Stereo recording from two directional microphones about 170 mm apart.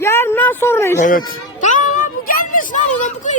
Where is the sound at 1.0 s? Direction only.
50° left (ahead or behind).